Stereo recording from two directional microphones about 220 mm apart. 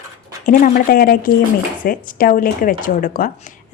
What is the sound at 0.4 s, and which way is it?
Speech, 40° left (ahead or behind).